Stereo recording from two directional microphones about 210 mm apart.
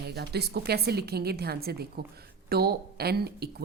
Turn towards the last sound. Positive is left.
turn(degrees=-50)  # may be behind; listen again after turning